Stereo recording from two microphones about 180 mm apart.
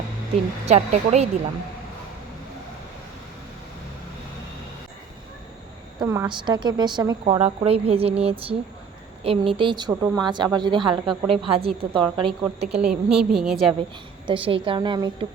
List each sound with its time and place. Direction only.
0.7 s speech: 35° right (ahead or behind)
6.0 s speech: 20° right (ahead or behind)
7.3 s speech: 35° right (ahead or behind)
12.8 s a woman's voice: 5° right (ahead or behind)
14.3 s speech: 30° right (ahead or behind)